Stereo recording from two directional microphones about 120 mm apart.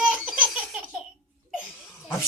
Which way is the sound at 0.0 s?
5° right (ahead or behind).